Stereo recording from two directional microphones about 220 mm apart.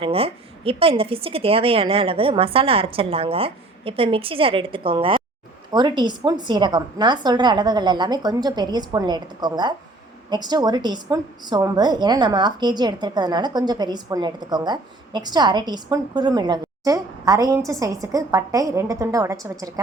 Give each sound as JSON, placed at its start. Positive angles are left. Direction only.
{"t": 0.0, "sound": "a woman's voice", "side_deg": -25}